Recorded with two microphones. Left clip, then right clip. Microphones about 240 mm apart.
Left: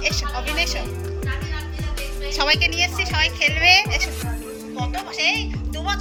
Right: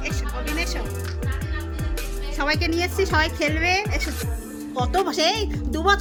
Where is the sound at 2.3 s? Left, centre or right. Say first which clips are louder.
Left 4 dB; right.